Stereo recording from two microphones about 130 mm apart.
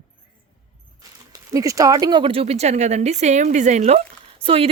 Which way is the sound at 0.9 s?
25° right (ahead or behind).